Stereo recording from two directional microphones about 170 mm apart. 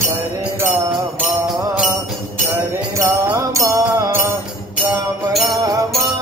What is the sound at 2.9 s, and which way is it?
Mantra, 20° right (ahead or behind).